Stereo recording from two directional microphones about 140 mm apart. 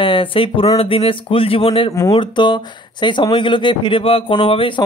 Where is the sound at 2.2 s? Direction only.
35° left (ahead or behind).